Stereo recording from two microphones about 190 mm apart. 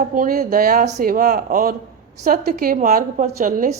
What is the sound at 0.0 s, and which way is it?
A woman's voice, 50° right (ahead or behind).